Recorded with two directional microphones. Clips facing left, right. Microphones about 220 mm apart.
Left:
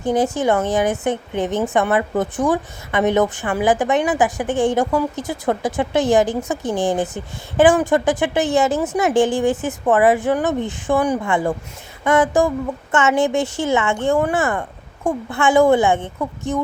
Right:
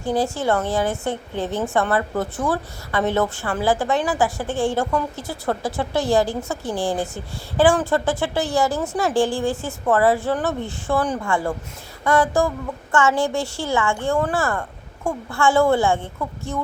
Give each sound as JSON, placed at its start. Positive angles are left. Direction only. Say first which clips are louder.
{"t": 0.0, "sound": "a woman's voice", "louder": "left 4 dB", "side_deg": 20}